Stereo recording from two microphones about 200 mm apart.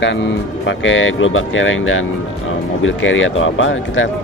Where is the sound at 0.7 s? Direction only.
70° left (ahead or behind).